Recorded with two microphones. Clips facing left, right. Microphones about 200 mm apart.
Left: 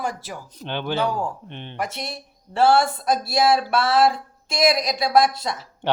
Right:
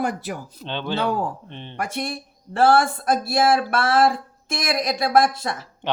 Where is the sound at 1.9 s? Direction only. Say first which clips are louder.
Right 5 dB; 55° right (ahead or behind).